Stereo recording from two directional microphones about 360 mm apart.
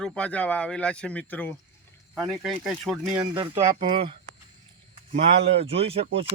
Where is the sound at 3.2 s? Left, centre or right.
Centre.